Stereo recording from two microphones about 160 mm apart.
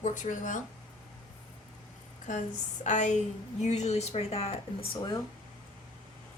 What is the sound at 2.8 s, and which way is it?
A woman's voice, 50° left (ahead or behind).